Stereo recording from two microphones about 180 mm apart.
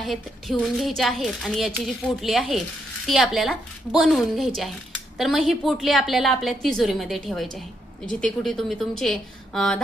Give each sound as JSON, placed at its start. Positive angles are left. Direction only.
{"t": 0.0, "sound": "a woman's voice", "side_deg": 0}